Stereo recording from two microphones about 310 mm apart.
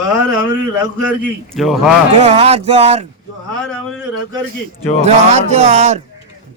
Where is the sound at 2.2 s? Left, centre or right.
Right.